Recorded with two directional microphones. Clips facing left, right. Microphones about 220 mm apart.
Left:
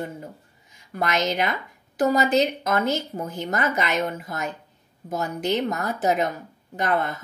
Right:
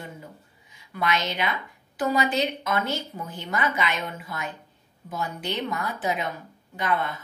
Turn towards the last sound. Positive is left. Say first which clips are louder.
# left 3 dB
turn(degrees=45)  # may be behind; listen again after turning